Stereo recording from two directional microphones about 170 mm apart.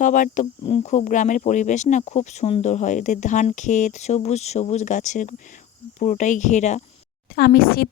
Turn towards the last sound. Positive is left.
turn(degrees=65)  # may be behind; listen again after turning